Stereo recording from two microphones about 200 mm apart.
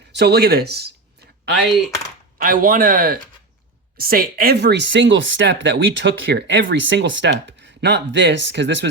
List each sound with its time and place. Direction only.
0.2 s speech: 55° right (ahead or behind)
2.4 s speech: 45° right (ahead or behind); by 8.9 s 60° right (ahead or behind)